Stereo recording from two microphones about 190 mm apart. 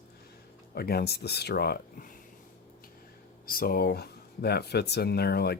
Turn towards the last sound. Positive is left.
turn(degrees=55)  # may be behind; listen again after turning